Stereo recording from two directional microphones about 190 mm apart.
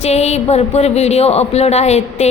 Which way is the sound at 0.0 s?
35° left (ahead or behind).